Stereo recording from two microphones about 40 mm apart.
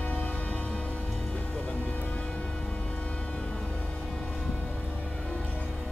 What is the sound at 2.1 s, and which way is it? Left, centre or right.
Music, left.